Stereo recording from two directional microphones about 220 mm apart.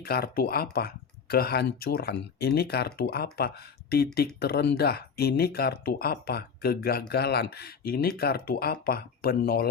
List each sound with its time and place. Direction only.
0.0 s speech: 45° left (ahead or behind)